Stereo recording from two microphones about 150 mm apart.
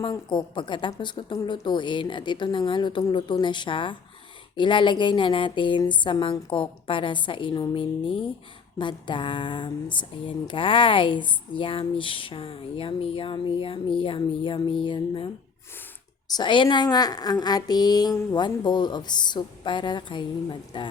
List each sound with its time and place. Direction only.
0.0 s speech: 30° left (ahead or behind)
16.3 s a woman's voice: 30° left (ahead or behind)